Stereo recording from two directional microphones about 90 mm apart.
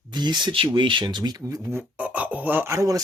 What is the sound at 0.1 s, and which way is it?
Speech, 55° right (ahead or behind).